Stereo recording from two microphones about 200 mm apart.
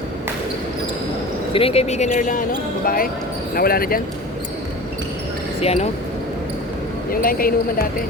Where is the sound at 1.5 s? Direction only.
30° left (ahead or behind).